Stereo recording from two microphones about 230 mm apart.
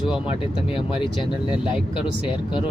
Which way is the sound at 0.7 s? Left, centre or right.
Left.